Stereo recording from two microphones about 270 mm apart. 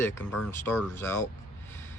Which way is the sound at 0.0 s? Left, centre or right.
Centre.